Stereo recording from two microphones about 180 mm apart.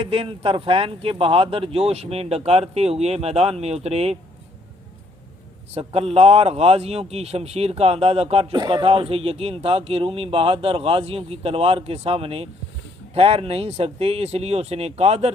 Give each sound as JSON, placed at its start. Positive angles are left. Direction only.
{"t": 0.0, "sound": "speech", "side_deg": -30}
{"t": 5.7, "sound": "speech", "side_deg": -35}